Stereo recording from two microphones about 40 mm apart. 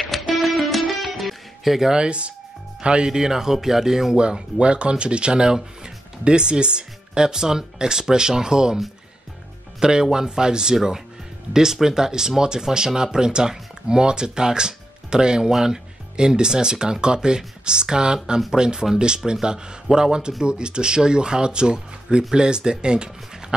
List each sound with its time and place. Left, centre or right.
0.0 s music: centre
2.0 s speech: right
3.1 s speech: centre
4.2 s speech: right
9.8 s speech: centre